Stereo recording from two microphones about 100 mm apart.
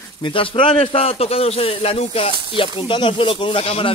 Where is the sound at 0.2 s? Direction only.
60° left (ahead or behind); by 2.3 s 80° left.